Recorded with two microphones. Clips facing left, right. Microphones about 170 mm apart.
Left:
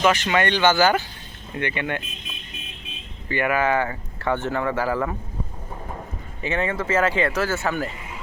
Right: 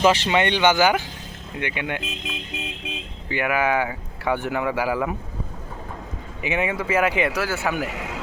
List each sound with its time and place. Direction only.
0.0 s speech: 30° right (ahead or behind)
0.4 s speech: 15° right (ahead or behind)
2.0 s speech: 90° right
3.2 s speech: 10° right (ahead or behind)
6.4 s speech: 15° right (ahead or behind)
7.9 s a sound: 90° right